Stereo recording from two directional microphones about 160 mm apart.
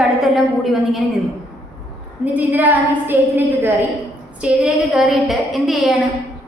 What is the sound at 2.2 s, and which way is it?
A woman's voice, 10° right (ahead or behind).